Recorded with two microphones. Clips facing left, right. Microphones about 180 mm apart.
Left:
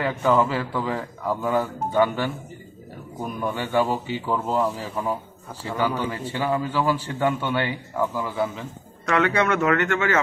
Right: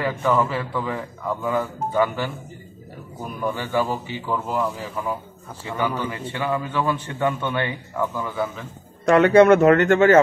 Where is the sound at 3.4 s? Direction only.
5° left (ahead or behind).